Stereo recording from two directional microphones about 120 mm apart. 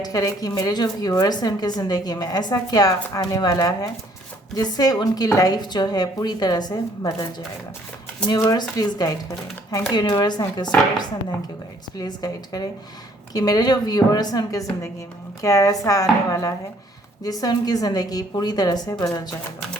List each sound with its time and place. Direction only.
0.0 s speech: 30° left (ahead or behind)
8.3 s speech: 35° left (ahead or behind)
11.9 s speech: 35° left (ahead or behind)